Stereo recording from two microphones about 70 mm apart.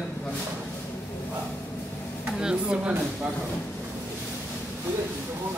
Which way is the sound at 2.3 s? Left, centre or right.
Centre.